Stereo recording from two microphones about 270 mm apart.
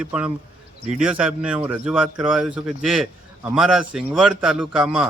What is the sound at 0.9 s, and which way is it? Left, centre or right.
A man's voice, centre.